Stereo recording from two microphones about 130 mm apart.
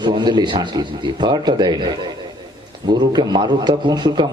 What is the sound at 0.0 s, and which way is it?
A man's voice, 35° right (ahead or behind).